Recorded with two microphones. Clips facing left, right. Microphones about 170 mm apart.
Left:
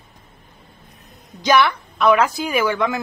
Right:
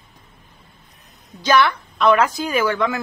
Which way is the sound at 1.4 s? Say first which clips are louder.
Even; 10° left (ahead or behind).